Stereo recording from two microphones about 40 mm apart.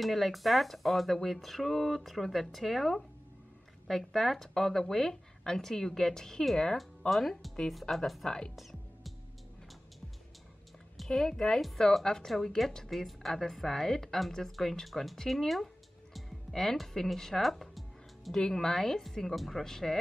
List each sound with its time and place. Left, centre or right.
0.0 s speech: centre
7.1 s speech: centre
11.1 s speech: centre
15.1 s music: centre
16.5 s speech: centre
18.3 s speech: centre